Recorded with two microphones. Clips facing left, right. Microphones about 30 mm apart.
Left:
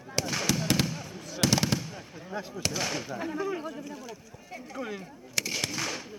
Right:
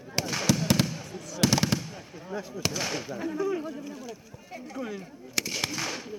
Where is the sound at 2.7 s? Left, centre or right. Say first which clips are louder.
Even; centre.